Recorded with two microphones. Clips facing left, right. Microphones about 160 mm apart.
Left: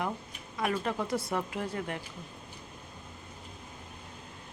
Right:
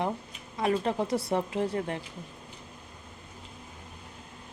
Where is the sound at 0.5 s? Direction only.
30° right (ahead or behind).